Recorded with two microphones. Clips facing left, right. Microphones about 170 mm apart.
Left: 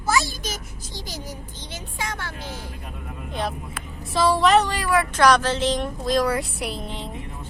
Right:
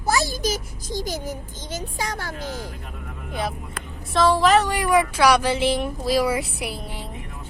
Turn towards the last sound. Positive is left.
turn(degrees=-5)  # may be behind; listen again after turning